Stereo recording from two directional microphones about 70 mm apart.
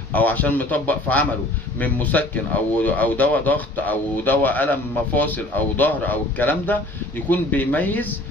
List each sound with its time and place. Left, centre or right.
0.1 s speech: left